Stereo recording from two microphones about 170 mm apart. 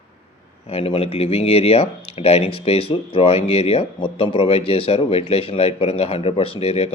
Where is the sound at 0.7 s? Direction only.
35° left (ahead or behind).